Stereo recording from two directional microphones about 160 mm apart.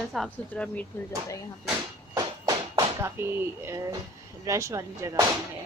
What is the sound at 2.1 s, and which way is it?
Music, 25° right (ahead or behind).